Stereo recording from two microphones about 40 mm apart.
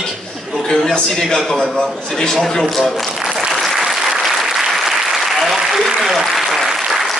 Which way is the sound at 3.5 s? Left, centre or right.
Centre.